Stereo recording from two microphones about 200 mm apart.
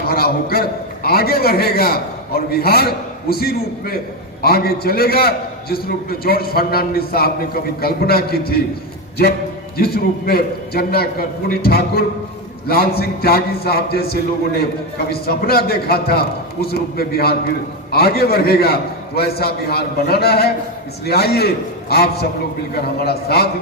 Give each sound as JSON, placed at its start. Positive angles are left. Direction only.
{"t": 0.1, "sound": "a man's voice", "side_deg": 50}
{"t": 9.7, "sound": "a man's voice", "side_deg": 50}